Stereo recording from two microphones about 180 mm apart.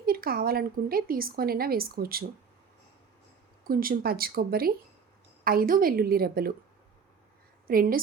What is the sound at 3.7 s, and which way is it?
Speech, 55° right (ahead or behind).